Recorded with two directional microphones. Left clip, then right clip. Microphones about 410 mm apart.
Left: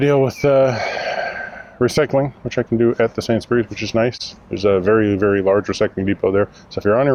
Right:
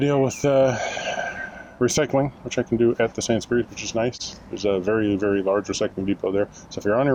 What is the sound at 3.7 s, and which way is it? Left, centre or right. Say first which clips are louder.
Speech: left 6 dB; left.